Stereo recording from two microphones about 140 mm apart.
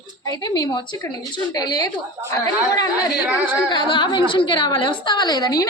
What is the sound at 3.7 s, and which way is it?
A woman's voice, 35° left (ahead or behind).